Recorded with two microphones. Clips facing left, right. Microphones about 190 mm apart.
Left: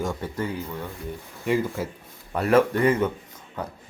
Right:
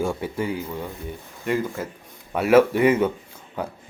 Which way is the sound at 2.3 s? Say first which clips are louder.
Right 3 dB; 5° right (ahead or behind).